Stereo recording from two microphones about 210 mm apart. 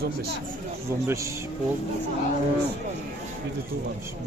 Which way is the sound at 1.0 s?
15° right (ahead or behind).